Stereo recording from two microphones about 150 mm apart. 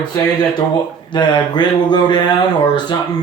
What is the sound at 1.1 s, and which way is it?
Speech, 30° left (ahead or behind).